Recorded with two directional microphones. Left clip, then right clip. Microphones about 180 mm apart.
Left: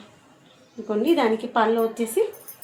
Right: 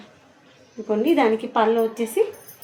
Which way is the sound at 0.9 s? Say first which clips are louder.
Right 2 dB; 15° right (ahead or behind).